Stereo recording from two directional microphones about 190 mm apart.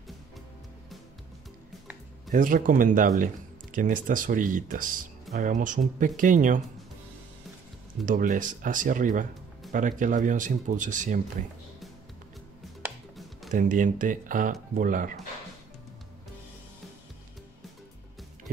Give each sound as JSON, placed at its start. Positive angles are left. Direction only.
{"t": 2.3, "sound": "speech", "side_deg": -45}
{"t": 8.0, "sound": "speech", "side_deg": -45}
{"t": 13.5, "sound": "speech", "side_deg": -45}